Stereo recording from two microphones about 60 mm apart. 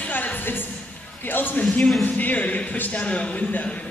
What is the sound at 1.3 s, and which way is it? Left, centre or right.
Speech, left.